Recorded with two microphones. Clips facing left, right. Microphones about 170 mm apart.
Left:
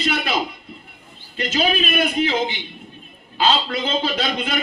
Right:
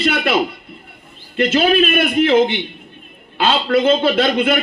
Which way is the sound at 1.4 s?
55° right (ahead or behind).